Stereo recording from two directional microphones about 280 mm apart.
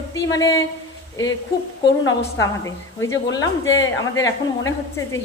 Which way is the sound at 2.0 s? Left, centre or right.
Centre.